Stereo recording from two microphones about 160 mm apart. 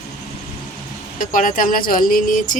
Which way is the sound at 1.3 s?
60° left (ahead or behind).